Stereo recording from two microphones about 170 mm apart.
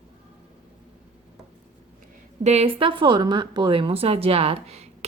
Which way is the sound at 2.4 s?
35° right (ahead or behind).